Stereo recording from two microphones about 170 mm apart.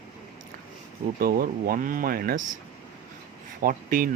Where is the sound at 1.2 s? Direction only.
60° right (ahead or behind).